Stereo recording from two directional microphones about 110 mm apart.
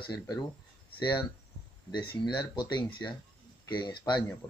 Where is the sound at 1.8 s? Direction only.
40° left (ahead or behind).